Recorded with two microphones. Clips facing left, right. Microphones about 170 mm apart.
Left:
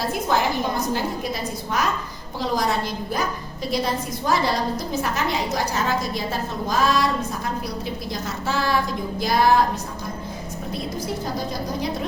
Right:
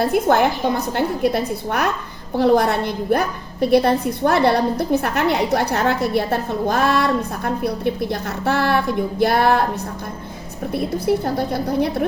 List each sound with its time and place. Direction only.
0.0 s a woman's voice: 60° right (ahead or behind)
10.8 s a woman's voice: 60° right (ahead or behind)